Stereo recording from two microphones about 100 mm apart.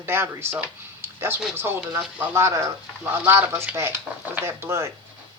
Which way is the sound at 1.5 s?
25° right (ahead or behind).